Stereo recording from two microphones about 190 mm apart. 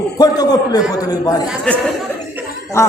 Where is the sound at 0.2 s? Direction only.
20° left (ahead or behind).